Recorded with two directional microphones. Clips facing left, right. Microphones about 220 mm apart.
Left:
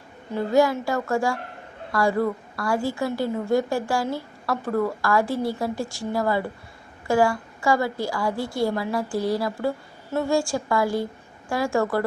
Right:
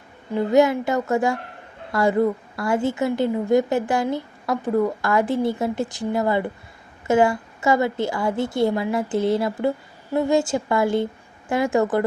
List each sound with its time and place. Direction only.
0.5 s a woman's voice: 20° right (ahead or behind)